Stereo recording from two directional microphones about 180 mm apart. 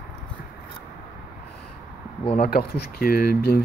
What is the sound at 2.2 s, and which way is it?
Speech, 35° left (ahead or behind).